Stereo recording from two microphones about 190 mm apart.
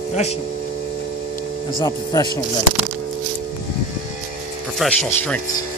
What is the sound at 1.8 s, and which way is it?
Speech, 20° left (ahead or behind).